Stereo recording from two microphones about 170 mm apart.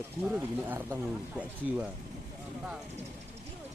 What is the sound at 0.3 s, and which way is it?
Speech, 10° right (ahead or behind).